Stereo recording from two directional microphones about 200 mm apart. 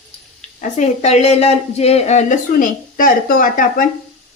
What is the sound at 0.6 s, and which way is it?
A woman's voice, 35° left (ahead or behind).